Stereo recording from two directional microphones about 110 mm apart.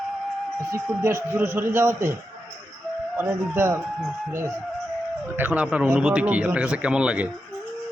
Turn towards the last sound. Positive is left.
turn(degrees=-10)  # may be behind; listen again after turning